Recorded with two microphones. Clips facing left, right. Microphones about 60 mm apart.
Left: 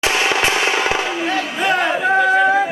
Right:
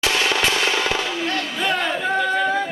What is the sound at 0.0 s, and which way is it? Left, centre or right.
Fireworks, left.